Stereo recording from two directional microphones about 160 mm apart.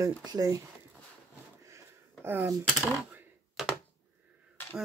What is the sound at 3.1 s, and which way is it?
Typing, 10° right (ahead or behind).